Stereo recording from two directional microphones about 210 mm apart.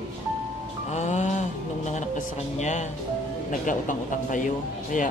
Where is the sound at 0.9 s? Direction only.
35° left (ahead or behind).